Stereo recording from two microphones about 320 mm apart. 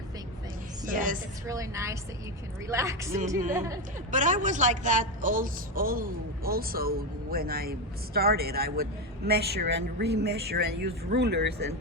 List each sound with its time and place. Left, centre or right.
0.9 s a woman's voice: right
1.5 s a woman's voice: centre
4.1 s a woman's voice: right